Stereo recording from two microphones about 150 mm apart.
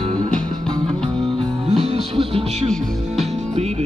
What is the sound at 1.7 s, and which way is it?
Music, 45° right (ahead or behind).